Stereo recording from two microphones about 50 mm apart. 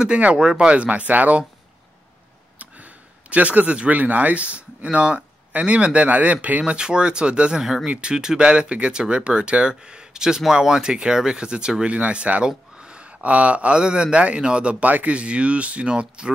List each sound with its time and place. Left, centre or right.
0.0 s speech: right
2.6 s speech: right
6.6 s speech: centre